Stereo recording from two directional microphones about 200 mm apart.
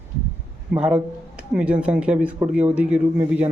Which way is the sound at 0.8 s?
5° right (ahead or behind).